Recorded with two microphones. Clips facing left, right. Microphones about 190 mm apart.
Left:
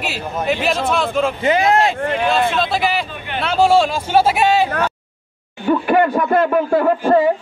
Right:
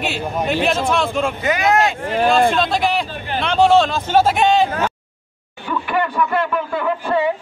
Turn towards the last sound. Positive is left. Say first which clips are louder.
# left 5 dB
turn(degrees=45)  # may be behind; listen again after turning